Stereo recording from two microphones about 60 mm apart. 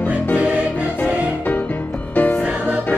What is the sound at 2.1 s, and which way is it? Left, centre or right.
Music, left.